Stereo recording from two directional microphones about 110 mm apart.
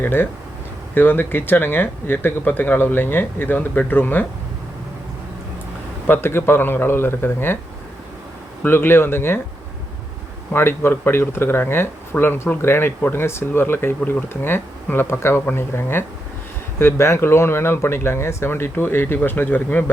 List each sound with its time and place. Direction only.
0.0 s speech: 20° left (ahead or behind)
6.1 s speech: 20° left (ahead or behind)
8.6 s speech: 20° left (ahead or behind)
10.5 s speech: 20° left (ahead or behind)